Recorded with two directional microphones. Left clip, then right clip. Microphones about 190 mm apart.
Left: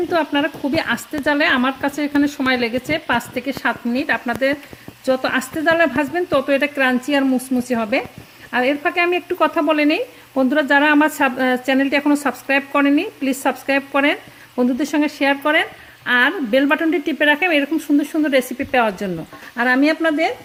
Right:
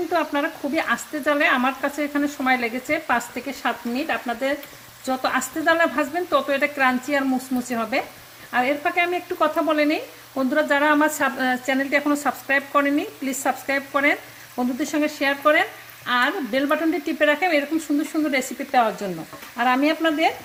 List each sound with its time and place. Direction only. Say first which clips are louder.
0.1 s speech: left 4 dB; 55° left (ahead or behind)